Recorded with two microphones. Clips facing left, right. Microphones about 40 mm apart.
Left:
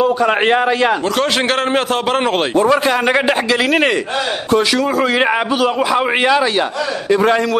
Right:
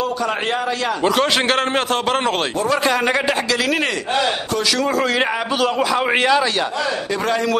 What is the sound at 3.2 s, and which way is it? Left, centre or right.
Speech, left.